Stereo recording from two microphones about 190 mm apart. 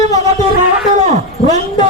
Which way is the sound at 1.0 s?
35° right (ahead or behind).